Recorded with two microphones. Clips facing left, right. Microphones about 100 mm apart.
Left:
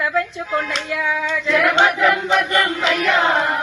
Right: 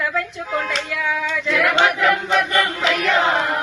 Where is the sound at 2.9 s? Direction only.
20° left (ahead or behind).